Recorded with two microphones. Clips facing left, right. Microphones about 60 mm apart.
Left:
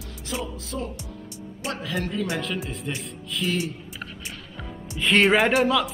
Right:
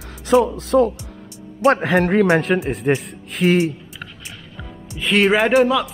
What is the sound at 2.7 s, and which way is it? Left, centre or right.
A man's voice, right.